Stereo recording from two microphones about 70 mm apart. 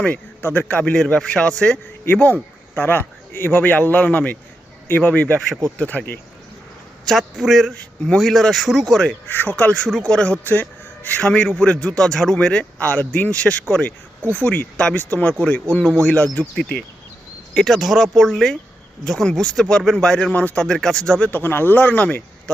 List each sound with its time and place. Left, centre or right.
0.0 s a man's voice: left
2.7 s a man's voice: left
7.0 s a man's voice: centre
7.8 s a man's voice: centre
9.3 s a man's voice: left
10.4 s a man's voice: left; by 17.7 s centre
17.7 s a man's voice: centre; by 20.7 s left
20.7 s a man's voice: centre
21.2 s a man's voice: left